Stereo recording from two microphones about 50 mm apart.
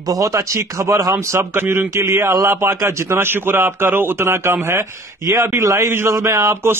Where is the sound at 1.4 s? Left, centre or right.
Right.